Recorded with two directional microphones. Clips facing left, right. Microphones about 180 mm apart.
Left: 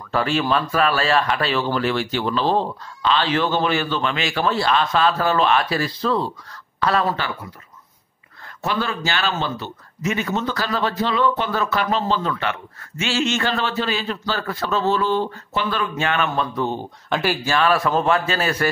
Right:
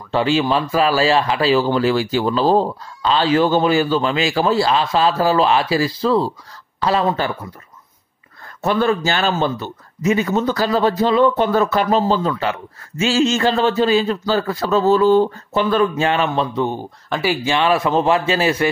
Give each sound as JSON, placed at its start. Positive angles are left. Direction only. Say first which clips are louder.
{"t": 0.1, "sound": "a man's voice", "louder": "right 3 dB", "side_deg": -25}
{"t": 8.6, "sound": "speech", "louder": "right 7 dB", "side_deg": -45}
{"t": 10.7, "sound": "speech", "louder": "right 6 dB", "side_deg": -40}
{"t": 17.1, "sound": "speech", "louder": "right 2 dB", "side_deg": -10}
{"t": 17.5, "sound": "a man's voice", "louder": "right 2 dB", "side_deg": -20}